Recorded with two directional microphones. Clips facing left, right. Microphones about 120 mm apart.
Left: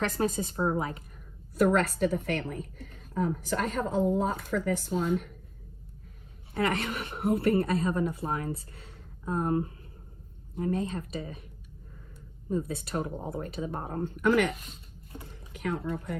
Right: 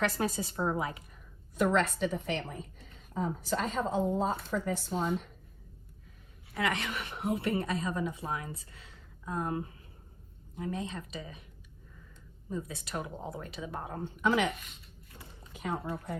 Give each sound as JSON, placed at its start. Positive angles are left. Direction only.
{"t": 0.0, "sound": "a woman's voice", "side_deg": 40}
{"t": 2.1, "sound": "a woman's voice", "side_deg": 55}
{"t": 6.5, "sound": "a woman's voice", "side_deg": 35}
{"t": 7.2, "sound": "a woman's voice", "side_deg": 55}
{"t": 8.7, "sound": "a sound", "side_deg": 50}
{"t": 10.6, "sound": "a woman's voice", "side_deg": 45}
{"t": 12.5, "sound": "a woman's voice", "side_deg": 45}
{"t": 15.5, "sound": "speech", "side_deg": 65}